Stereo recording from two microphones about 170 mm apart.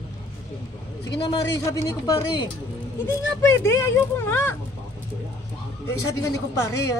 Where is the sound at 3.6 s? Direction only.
15° left (ahead or behind).